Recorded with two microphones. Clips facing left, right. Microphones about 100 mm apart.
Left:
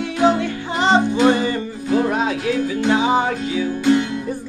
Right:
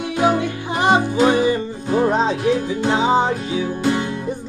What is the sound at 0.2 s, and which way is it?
Music, 15° right (ahead or behind).